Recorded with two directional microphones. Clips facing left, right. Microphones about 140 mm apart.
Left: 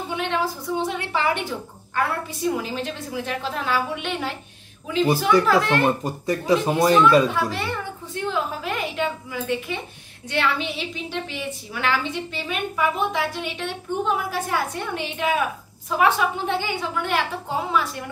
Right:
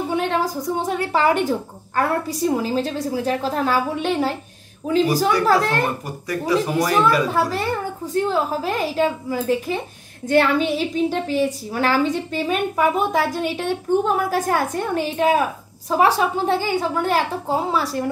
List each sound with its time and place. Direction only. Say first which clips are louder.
0.1 s a woman's voice: right 2 dB; 40° right (ahead or behind)
5.5 s a woman's voice: right 1 dB; 40° right (ahead or behind)
6.0 s speech: left 2 dB; 25° left (ahead or behind)
7.2 s a woman's voice: right 4 dB; 40° right (ahead or behind)